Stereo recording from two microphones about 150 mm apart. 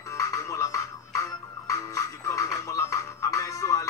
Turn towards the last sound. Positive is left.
turn(degrees=20)  # may be behind; listen again after turning